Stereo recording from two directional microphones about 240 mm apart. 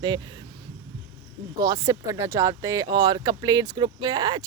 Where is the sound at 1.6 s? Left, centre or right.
Centre.